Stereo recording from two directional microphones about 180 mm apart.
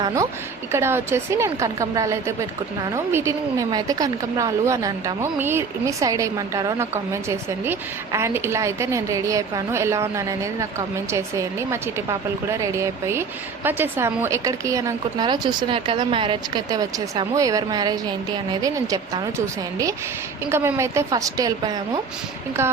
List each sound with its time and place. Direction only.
0.0 s a woman's voice: 15° right (ahead or behind)
20.5 s a woman's voice: 10° right (ahead or behind)